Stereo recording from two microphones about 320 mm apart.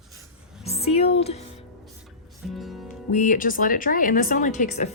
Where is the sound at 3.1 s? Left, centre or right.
Left.